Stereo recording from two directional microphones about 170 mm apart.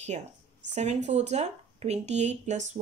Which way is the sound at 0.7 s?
40° right (ahead or behind).